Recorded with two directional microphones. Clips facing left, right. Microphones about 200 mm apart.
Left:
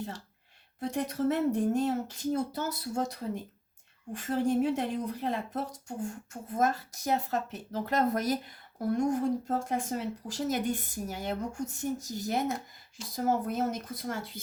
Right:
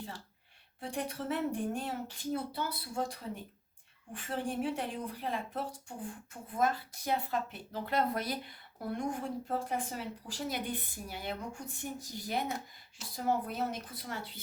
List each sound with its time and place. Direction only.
0.8 s speech: 40° left (ahead or behind)